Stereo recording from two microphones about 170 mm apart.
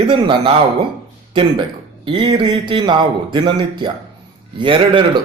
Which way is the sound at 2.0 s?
25° right (ahead or behind).